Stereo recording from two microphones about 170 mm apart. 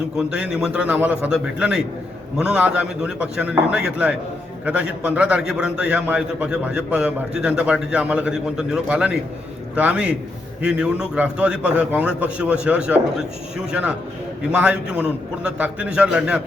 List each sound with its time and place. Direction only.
0.2 s a man's voice: 5° right (ahead or behind)